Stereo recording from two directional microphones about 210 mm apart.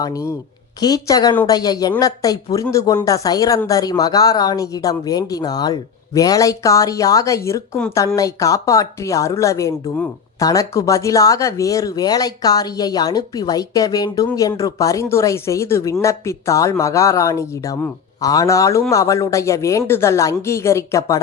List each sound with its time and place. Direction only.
0.0 s speech: 15° left (ahead or behind)